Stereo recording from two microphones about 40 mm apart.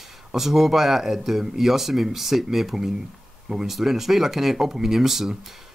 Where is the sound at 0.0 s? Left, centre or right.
Centre.